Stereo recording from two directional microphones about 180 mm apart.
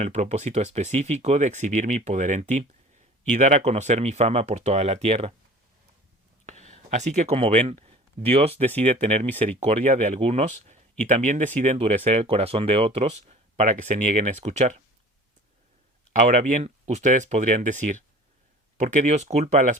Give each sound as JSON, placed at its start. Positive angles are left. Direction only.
{"t": 0.0, "sound": "speech", "side_deg": -40}
{"t": 6.4, "sound": "speech", "side_deg": -40}
{"t": 16.1, "sound": "speech", "side_deg": -45}